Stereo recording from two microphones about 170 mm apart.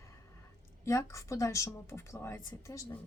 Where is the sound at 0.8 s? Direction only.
15° left (ahead or behind).